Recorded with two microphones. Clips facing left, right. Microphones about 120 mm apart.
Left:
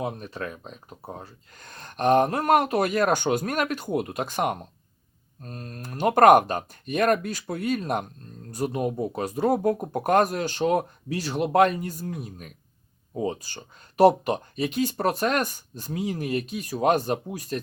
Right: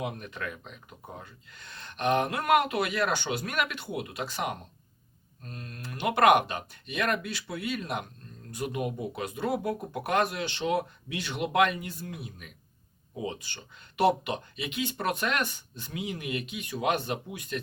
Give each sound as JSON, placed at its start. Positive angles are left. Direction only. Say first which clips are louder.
{"t": 0.0, "sound": "speech", "louder": "left 4 dB", "side_deg": 35}